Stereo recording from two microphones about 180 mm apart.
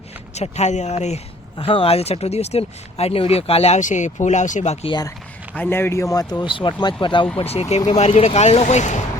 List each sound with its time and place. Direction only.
0.3 s speech: 40° left (ahead or behind)
5.5 s speech: 10° left (ahead or behind); by 9.0 s 40° left (ahead or behind)